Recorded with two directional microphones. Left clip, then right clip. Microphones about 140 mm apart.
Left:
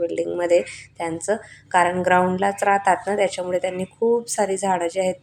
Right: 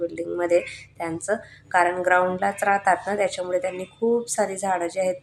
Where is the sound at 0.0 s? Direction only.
15° left (ahead or behind).